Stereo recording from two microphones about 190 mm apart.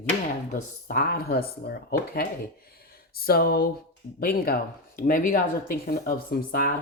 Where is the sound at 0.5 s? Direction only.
50° left (ahead or behind).